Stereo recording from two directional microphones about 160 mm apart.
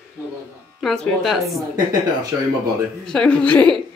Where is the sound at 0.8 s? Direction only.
5° left (ahead or behind).